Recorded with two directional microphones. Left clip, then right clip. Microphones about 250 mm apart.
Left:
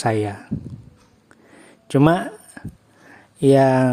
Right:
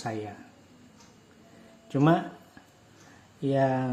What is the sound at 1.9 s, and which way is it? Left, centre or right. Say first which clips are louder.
Speech: left 8 dB; left.